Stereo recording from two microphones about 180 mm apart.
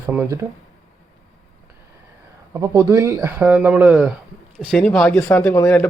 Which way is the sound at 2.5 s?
15° right (ahead or behind).